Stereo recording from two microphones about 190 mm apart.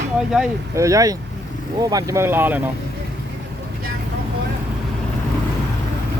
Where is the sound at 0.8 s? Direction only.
15° right (ahead or behind).